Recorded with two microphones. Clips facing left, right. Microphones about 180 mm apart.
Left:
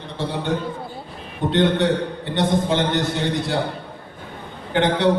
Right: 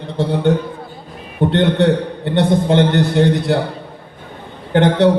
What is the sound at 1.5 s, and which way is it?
A man's voice, 60° right (ahead or behind).